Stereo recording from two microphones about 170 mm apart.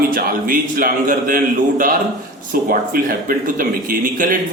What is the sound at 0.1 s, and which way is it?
A man's voice, 60° right (ahead or behind).